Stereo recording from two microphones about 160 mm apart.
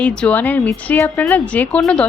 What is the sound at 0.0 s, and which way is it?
A woman's voice, 5° left (ahead or behind).